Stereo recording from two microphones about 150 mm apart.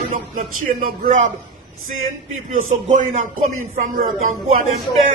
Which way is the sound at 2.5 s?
55° right (ahead or behind).